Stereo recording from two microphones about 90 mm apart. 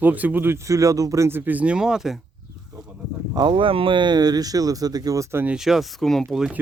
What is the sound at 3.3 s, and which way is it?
Speech, 60° right (ahead or behind).